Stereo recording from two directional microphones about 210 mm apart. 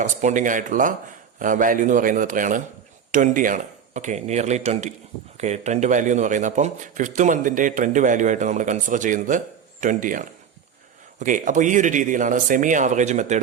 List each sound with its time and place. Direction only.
0.0 s speech: 35° right (ahead or behind)